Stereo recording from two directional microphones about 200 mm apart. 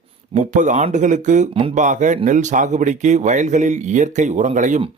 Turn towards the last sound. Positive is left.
turn(degrees=-35)  # may be behind; listen again after turning